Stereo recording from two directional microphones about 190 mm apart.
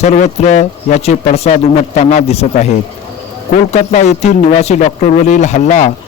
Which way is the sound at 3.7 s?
35° left (ahead or behind).